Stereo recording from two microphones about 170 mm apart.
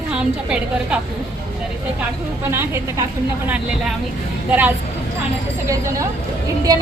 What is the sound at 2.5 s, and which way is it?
A woman's voice, 15° right (ahead or behind).